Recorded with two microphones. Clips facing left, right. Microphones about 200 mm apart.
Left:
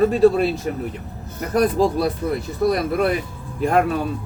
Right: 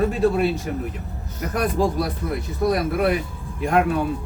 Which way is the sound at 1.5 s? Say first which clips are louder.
Left 5 dB; 35° left (ahead or behind).